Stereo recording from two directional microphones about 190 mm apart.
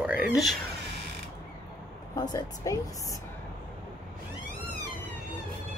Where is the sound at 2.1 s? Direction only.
20° left (ahead or behind).